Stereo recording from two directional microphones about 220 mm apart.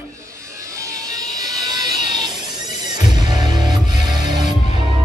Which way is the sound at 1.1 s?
15° right (ahead or behind).